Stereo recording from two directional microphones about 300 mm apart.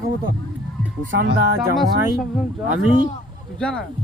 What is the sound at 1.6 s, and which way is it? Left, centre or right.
Speech, centre.